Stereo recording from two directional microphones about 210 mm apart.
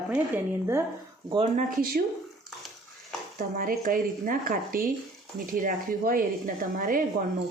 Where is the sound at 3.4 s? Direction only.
40° right (ahead or behind).